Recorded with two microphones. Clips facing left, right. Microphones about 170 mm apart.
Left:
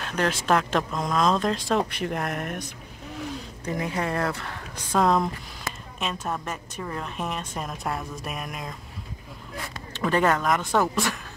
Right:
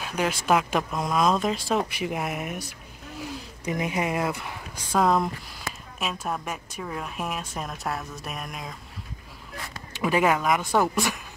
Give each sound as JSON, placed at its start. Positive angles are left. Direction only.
{"t": 0.0, "sound": "a woman's voice", "side_deg": -5}
{"t": 3.6, "sound": "a woman's voice", "side_deg": -15}
{"t": 9.9, "sound": "speech", "side_deg": -10}